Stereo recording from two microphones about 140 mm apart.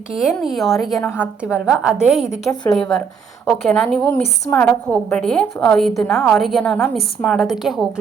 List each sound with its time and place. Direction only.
0.1 s a woman's voice: 5° right (ahead or behind)
1.5 s a woman's voice: 15° left (ahead or behind)
1.8 s a woman's voice: 5° right (ahead or behind)